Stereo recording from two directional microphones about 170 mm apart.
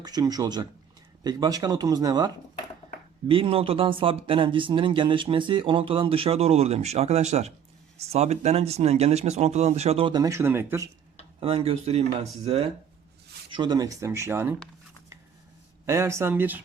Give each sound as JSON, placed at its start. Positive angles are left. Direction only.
{"t": 0.0, "sound": "speech", "side_deg": -20}
{"t": 11.3, "sound": "speech", "side_deg": -35}
{"t": 13.6, "sound": "speech", "side_deg": -25}
{"t": 15.9, "sound": "speech", "side_deg": -15}